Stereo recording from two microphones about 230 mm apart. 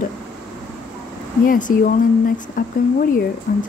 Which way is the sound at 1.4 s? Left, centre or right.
Left.